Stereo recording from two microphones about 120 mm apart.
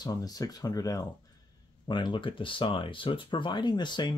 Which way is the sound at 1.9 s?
40° left (ahead or behind).